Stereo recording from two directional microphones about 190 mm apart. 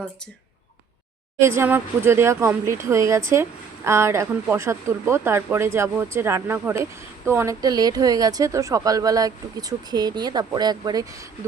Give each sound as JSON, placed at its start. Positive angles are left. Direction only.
{"t": 1.4, "sound": "speech", "side_deg": -15}